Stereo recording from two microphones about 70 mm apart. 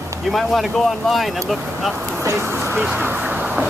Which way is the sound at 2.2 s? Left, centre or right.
Right.